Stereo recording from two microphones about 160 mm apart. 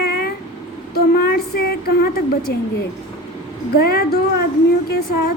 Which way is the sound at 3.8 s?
75° left (ahead or behind).